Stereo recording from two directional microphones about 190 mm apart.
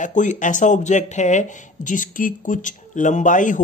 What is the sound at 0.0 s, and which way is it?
Speech, 40° left (ahead or behind).